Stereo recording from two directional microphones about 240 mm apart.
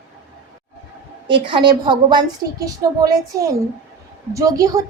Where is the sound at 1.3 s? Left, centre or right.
Centre.